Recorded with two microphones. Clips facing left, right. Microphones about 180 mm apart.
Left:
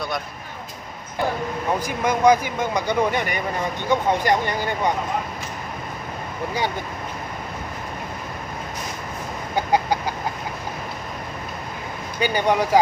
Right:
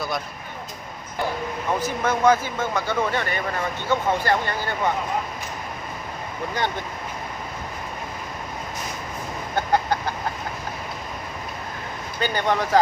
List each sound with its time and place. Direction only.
1.8 s speech: 15° left (ahead or behind)
9.6 s chicken: 10° left (ahead or behind)
12.2 s speech: 10° left (ahead or behind)